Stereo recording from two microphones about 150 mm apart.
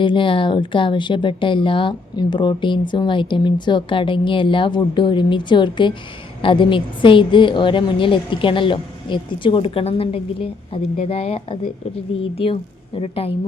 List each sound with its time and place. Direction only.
0.0 s a woman's voice: 35° left (ahead or behind)
13.0 s a woman's voice: 40° left (ahead or behind)